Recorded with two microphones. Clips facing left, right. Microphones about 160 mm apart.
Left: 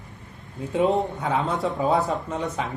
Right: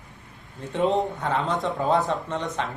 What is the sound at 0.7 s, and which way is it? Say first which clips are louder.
Speech: left 1 dB; 5° left (ahead or behind).